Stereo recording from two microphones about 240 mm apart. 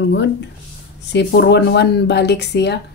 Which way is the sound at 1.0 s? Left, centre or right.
Left.